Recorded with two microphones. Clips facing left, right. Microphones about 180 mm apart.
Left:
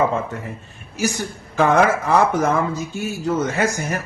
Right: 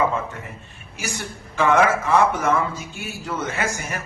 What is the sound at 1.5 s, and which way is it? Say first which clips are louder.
Speech: left 2 dB; 35° left (ahead or behind).